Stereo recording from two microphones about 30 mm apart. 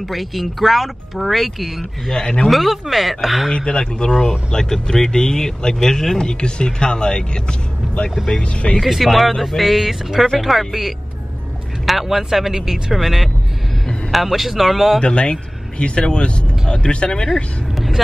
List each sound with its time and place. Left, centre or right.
0.1 s speech: centre
3.5 s speech: left
4.5 s speech: centre
6.2 s speech: left
8.4 s speech: left
8.8 s a man's voice: centre
15.0 s speech: left
17.7 s vehicle: centre